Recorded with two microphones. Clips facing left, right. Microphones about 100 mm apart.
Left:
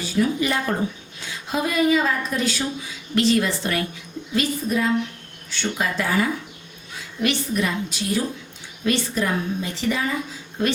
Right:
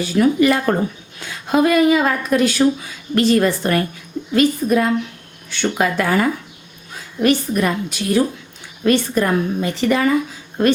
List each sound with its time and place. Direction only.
0.2 s speech: 65° right (ahead or behind); by 3.8 s 45° right (ahead or behind)
4.4 s a woman's voice: 60° right (ahead or behind)